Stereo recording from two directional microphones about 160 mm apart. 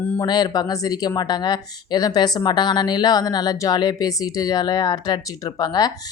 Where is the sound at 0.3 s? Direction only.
25° left (ahead or behind).